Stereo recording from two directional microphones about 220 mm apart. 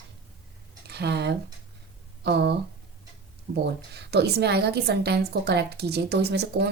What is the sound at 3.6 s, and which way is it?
Speech, 50° right (ahead or behind).